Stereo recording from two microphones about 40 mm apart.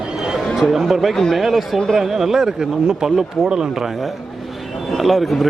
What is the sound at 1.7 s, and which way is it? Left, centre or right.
Speech, centre.